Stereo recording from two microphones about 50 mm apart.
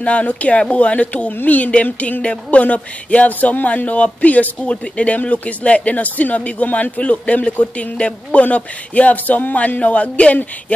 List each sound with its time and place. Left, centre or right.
0.0 s speech: left